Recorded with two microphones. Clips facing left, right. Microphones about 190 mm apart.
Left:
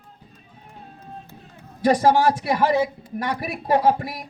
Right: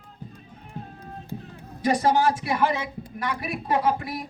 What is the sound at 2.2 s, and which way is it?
A woman's voice, 35° left (ahead or behind).